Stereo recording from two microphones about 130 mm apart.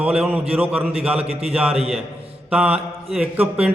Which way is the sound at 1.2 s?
50° right (ahead or behind).